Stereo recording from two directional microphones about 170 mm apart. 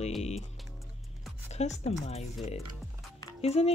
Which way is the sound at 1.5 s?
40° left (ahead or behind).